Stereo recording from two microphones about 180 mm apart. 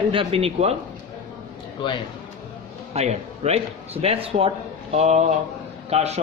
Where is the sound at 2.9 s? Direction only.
35° right (ahead or behind).